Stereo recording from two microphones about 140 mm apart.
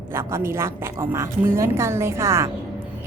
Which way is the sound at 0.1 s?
15° right (ahead or behind).